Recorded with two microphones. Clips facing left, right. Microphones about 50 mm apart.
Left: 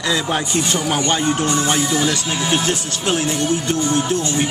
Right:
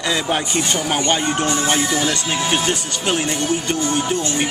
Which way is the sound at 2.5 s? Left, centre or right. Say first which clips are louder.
Even; centre.